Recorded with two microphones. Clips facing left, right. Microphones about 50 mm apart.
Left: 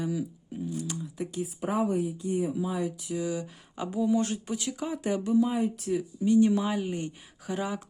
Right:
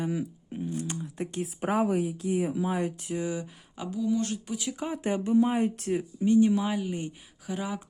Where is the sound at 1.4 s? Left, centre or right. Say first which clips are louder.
Right 2 dB; right.